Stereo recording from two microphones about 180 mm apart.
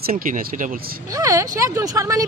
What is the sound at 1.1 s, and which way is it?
Speech, 20° right (ahead or behind).